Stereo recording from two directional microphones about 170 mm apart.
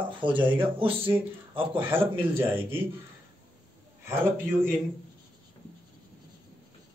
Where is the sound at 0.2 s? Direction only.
30° right (ahead or behind).